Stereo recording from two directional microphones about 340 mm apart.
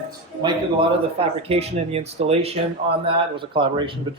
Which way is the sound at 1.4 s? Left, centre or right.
Centre.